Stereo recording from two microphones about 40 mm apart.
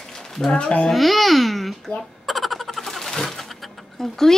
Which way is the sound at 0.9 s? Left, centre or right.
Centre.